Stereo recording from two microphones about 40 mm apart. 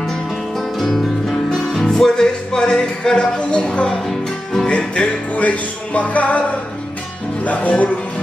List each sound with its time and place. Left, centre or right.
0.0 s music: centre
2.7 s a sound: centre
3.3 s speech: left
3.8 s music: centre
4.6 s music: left
5.3 s music: left
7.4 s music: left